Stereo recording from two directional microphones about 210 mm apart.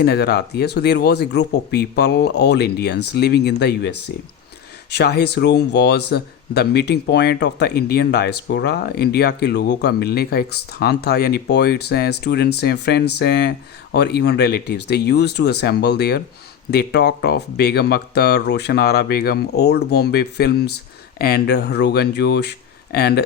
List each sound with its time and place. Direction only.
0.0 s speech: 50° left (ahead or behind)